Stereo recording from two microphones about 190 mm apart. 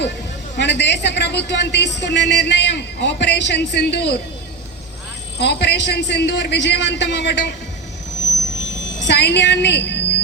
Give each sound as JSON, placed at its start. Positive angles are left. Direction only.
{"t": 0.5, "sound": "a woman's voice", "side_deg": 65}
{"t": 5.4, "sound": "a woman's voice", "side_deg": 60}
{"t": 9.0, "sound": "a woman's voice", "side_deg": 65}